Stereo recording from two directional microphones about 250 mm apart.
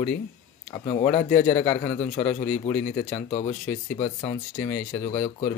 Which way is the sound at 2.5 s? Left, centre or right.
Centre.